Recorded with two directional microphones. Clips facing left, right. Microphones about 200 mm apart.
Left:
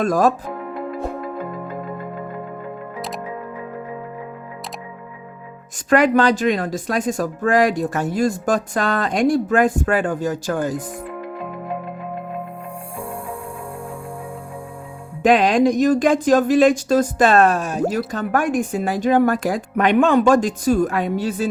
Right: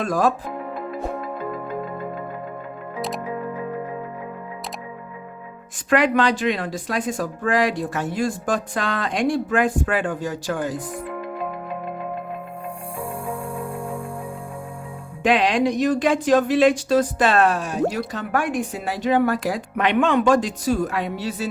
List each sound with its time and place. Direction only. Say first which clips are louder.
0.0 s speech: left 4 dB; 45° left (ahead or behind)
5.9 s speech: left 3 dB; 45° left (ahead or behind)
15.2 s speech: left 4 dB; 45° left (ahead or behind)